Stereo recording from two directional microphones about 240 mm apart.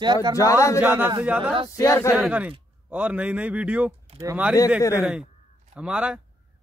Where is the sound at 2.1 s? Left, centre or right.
Centre.